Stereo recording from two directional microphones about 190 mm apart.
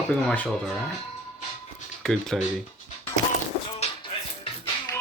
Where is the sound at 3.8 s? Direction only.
25° left (ahead or behind).